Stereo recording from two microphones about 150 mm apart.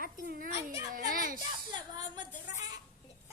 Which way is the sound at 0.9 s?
70° right (ahead or behind).